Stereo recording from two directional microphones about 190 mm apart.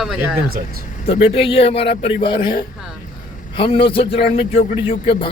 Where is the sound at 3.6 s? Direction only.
25° left (ahead or behind).